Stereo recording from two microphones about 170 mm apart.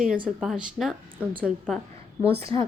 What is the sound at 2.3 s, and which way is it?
Speech, 30° right (ahead or behind).